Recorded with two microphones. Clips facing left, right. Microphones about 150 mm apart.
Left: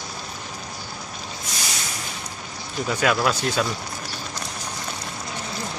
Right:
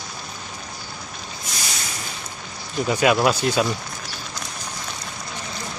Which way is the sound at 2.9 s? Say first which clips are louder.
Right 3 dB; 10° right (ahead or behind).